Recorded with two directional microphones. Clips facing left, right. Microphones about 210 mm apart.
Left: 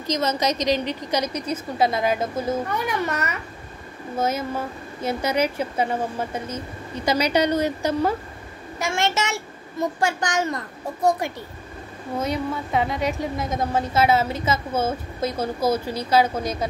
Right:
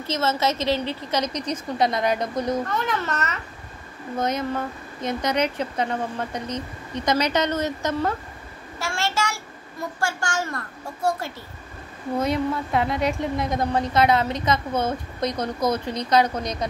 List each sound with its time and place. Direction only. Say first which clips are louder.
0.0 s a woman's voice: left 1 dB; 15° left (ahead or behind)
12.2 s a woman's voice: right 2 dB; centre (ahead or behind)